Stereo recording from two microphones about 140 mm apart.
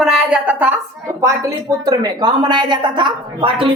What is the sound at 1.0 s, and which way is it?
A woman's voice, 25° right (ahead or behind).